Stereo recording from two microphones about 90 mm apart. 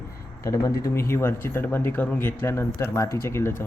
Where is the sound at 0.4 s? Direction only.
35° left (ahead or behind).